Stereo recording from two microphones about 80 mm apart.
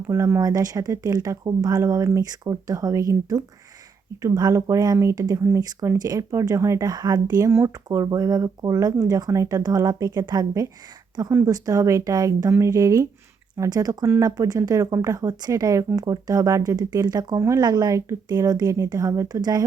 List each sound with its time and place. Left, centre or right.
0.1 s speech: right
6.0 s speech: right
6.8 s speech: right
11.3 s speech: right
11.5 s speech: right